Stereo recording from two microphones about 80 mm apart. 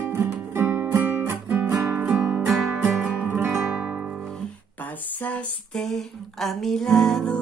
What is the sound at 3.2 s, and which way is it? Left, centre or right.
Music, right.